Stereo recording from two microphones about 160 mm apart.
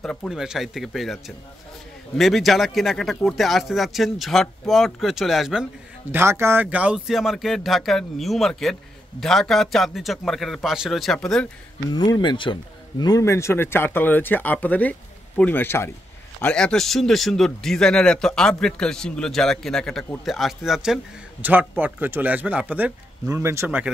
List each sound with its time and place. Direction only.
0.0 s speech: 5° left (ahead or behind)
6.1 s speech: 15° right (ahead or behind); by 11.4 s 5° left (ahead or behind)
11.9 s speech: 25° left (ahead or behind); by 23.9 s 15° right (ahead or behind)